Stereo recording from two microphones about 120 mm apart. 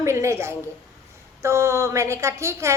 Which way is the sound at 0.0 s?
25° right (ahead or behind).